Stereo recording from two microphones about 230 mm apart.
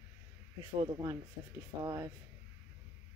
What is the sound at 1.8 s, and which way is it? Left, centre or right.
Speech, centre.